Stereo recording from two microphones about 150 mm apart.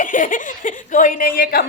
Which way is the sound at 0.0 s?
60° left (ahead or behind).